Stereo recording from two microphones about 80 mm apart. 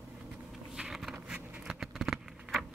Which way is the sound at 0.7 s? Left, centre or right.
Centre.